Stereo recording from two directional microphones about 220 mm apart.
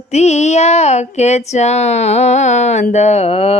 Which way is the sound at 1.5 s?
30° left (ahead or behind).